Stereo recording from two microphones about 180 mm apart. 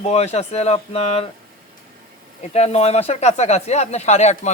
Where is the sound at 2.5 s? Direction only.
35° left (ahead or behind).